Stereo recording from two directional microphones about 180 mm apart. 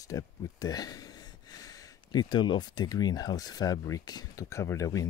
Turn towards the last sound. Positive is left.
turn(degrees=15)  # may be behind; listen again after turning